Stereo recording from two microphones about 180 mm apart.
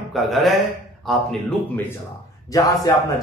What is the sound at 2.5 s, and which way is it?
Speech, 20° left (ahead or behind).